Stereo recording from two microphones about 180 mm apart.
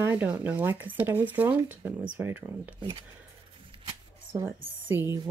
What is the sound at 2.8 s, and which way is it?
Speech, 25° right (ahead or behind).